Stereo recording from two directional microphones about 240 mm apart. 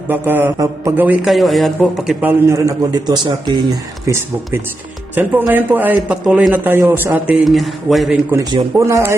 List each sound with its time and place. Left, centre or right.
0.1 s a man's voice: centre
2.5 s a man's voice: centre
5.1 s a man's voice: centre